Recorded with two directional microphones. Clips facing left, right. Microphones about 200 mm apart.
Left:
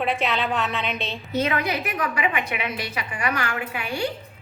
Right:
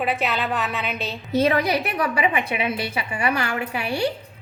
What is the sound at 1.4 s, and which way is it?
A woman's voice, 35° right (ahead or behind).